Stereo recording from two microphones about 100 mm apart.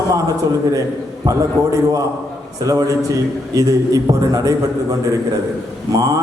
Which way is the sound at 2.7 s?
35° right (ahead or behind).